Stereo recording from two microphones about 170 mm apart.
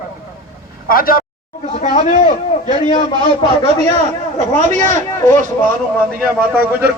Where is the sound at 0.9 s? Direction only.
60° left (ahead or behind).